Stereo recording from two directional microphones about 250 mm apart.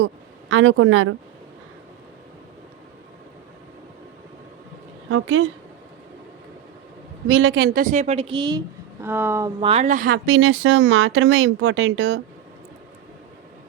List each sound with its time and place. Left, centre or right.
0.0 s speech: right
5.0 s speech: right
7.3 s a woman's voice: right